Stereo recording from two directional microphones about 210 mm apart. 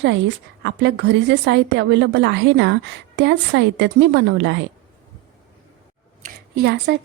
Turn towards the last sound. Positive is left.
turn(degrees=-50)  # may be behind; listen again after turning